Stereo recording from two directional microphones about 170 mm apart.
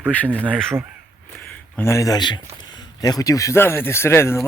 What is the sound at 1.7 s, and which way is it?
Speech, 15° left (ahead or behind).